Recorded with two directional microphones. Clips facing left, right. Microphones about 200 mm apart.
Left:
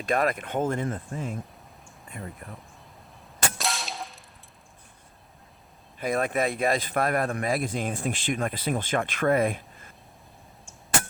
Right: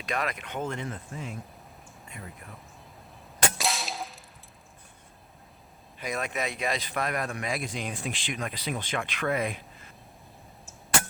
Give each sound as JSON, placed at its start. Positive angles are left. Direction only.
{"t": 0.0, "sound": "speech", "side_deg": 50}
{"t": 2.2, "sound": "speech", "side_deg": 50}
{"t": 3.6, "sound": "cap gun", "side_deg": 0}
{"t": 6.0, "sound": "speech", "side_deg": 55}